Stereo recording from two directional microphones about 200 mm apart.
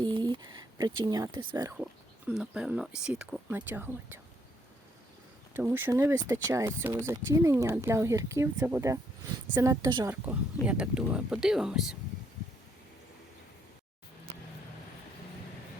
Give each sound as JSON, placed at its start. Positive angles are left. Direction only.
{"t": 0.0, "sound": "speech", "side_deg": -20}
{"t": 1.7, "sound": "speech", "side_deg": -5}
{"t": 5.5, "sound": "speech", "side_deg": -10}